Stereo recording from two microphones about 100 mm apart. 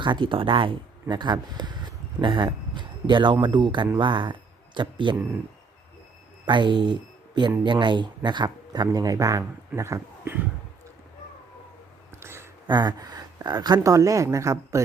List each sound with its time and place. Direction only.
0.0 s speech: 55° right (ahead or behind)
1.1 s speech: 50° right (ahead or behind)
6.4 s speech: 50° right (ahead or behind); by 10.3 s 30° right (ahead or behind)
12.2 s a sound: 25° right (ahead or behind)
12.6 s speech: 45° right (ahead or behind); by 14.8 s 30° right (ahead or behind)